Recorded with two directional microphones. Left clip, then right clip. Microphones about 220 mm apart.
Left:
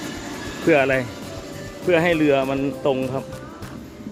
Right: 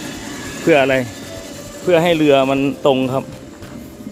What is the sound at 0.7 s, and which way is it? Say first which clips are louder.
Speech: right 4 dB; 15° right (ahead or behind).